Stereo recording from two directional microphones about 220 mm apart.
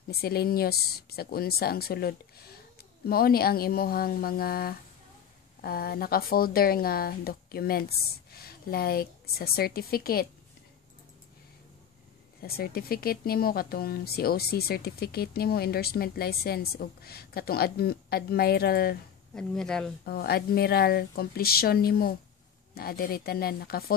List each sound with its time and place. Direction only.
0.1 s speech: 45° left (ahead or behind)
12.4 s speech: 45° left (ahead or behind)
19.3 s speech: 5° left (ahead or behind)
20.1 s speech: 45° left (ahead or behind)